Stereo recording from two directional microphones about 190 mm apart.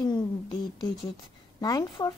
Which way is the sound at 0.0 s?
20° left (ahead or behind).